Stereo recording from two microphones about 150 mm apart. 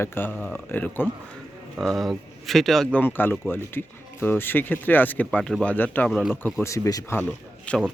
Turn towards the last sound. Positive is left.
turn(degrees=10)  # may be behind; listen again after turning